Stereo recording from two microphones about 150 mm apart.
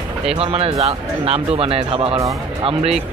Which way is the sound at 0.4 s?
40° right (ahead or behind).